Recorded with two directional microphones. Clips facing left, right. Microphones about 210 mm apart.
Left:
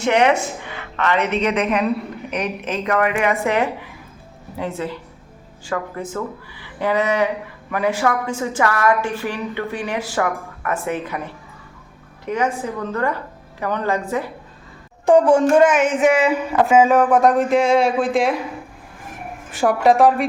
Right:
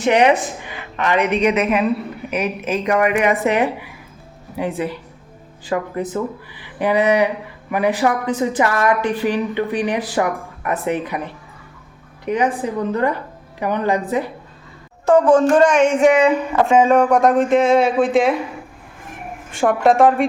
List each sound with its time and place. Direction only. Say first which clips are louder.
0.0 s a woman's voice: right 2 dB; 15° right (ahead or behind)
4.8 s a woman's voice: right 3 dB; 15° right (ahead or behind)
12.2 s a woman's voice: right 3 dB; 15° right (ahead or behind)
15.0 s speech: right 1 dB; 15° left (ahead or behind)
19.5 s speech: right 1 dB; centre (ahead or behind)